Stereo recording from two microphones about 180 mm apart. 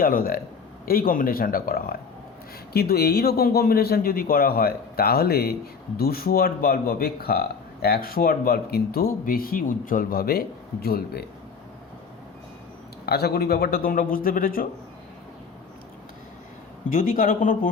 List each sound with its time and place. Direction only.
0.0 s speech: 55° left (ahead or behind)
13.1 s speech: 65° left (ahead or behind)
16.9 s speech: 50° left (ahead or behind)